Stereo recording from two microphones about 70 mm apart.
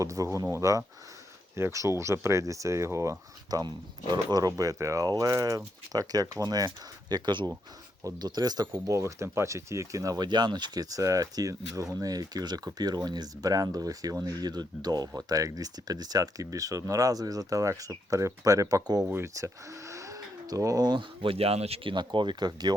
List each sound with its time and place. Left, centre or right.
0.0 s speech: right
3.5 s speech: right
5.0 s speech: right
7.1 s speech: right
8.9 s speech: right
10.2 s speech: right
15.1 s speech: right
19.1 s speech: right
21.9 s speech: right